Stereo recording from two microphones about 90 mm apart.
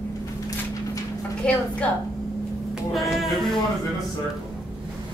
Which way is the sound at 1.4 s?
15° left (ahead or behind).